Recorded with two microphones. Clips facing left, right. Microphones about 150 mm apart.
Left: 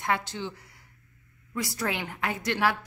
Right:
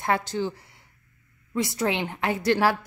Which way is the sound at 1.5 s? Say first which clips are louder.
Right 5 dB; 25° right (ahead or behind).